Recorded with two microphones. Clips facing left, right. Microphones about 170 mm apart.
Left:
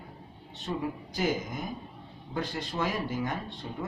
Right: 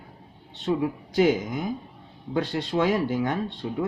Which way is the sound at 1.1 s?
65° right (ahead or behind).